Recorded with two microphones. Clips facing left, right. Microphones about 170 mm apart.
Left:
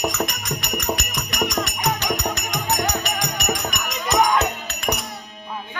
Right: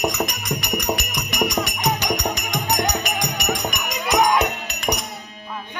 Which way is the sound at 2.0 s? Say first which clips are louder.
Right 1 dB; 15° right (ahead or behind).